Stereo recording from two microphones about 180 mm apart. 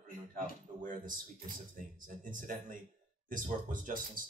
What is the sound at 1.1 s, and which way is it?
Speech, 50° right (ahead or behind).